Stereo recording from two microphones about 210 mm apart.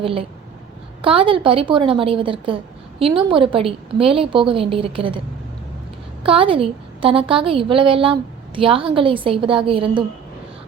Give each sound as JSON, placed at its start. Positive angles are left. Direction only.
{"t": 0.0, "sound": "a woman's voice", "side_deg": -25}
{"t": 6.2, "sound": "a woman's voice", "side_deg": -25}